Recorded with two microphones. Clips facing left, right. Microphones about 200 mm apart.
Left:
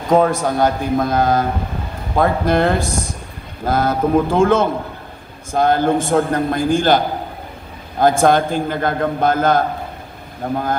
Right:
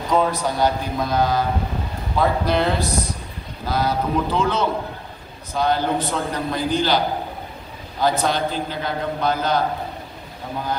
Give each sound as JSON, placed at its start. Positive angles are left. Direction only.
{"t": 0.1, "sound": "a man's voice", "side_deg": 50}
{"t": 8.0, "sound": "a man's voice", "side_deg": 50}